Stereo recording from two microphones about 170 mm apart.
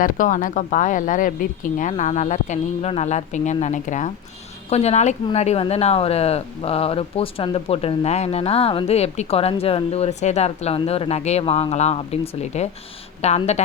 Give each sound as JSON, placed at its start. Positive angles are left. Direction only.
{"t": 0.0, "sound": "speech", "side_deg": 50}